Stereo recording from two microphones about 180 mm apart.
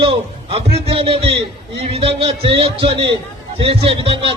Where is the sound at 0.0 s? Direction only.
30° right (ahead or behind).